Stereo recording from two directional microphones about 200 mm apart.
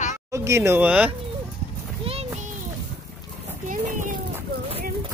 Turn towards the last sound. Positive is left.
turn(degrees=-40)  # may be behind; listen again after turning